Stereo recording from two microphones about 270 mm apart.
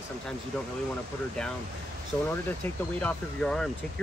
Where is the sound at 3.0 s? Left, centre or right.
Centre.